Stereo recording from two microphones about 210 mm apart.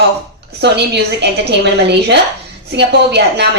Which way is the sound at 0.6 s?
55° right (ahead or behind).